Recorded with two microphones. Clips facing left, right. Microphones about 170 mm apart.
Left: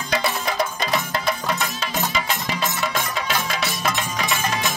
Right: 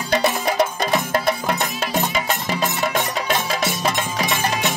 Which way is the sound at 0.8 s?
45° right (ahead or behind).